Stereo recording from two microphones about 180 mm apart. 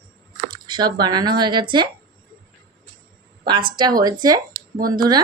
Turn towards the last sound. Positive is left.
turn(degrees=-20)  # may be behind; listen again after turning